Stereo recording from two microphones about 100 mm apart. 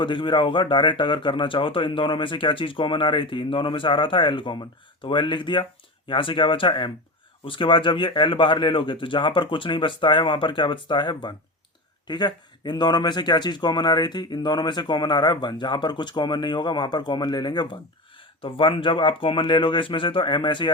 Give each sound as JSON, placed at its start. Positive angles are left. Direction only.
{"t": 0.0, "sound": "speech", "side_deg": 55}
{"t": 18.2, "sound": "speech", "side_deg": 60}